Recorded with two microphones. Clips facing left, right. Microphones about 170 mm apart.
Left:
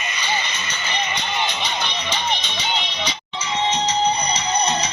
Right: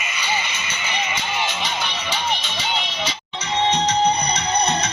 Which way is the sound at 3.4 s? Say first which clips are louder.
Right 2 dB; 60° right (ahead or behind).